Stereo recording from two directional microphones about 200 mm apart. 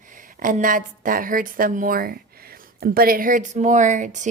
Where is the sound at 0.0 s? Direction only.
40° right (ahead or behind).